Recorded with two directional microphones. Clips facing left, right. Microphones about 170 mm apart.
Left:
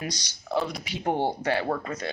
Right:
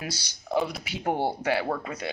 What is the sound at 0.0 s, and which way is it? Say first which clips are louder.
A man's voice: left 2 dB; 5° right (ahead or behind).